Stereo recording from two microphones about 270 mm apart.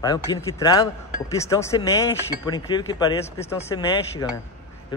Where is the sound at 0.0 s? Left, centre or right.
Centre.